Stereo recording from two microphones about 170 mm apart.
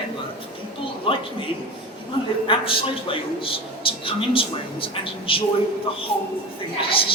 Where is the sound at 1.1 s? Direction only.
30° left (ahead or behind).